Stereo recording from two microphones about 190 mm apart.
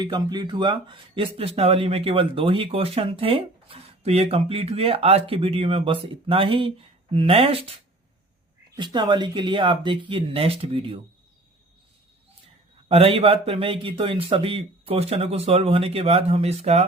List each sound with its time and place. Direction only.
0.0 s speech: 25° right (ahead or behind)
8.7 s speech: 25° right (ahead or behind)
12.9 s speech: 30° right (ahead or behind)